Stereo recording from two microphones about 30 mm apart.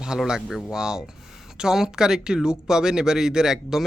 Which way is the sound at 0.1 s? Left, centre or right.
Right.